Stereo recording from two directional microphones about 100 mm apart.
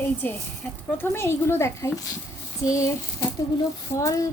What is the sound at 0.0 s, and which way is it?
A woman's voice, 20° left (ahead or behind).